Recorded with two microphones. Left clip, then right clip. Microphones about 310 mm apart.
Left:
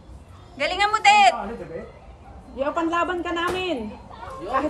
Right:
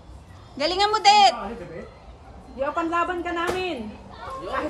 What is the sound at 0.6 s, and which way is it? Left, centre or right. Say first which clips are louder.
Speech: even; centre.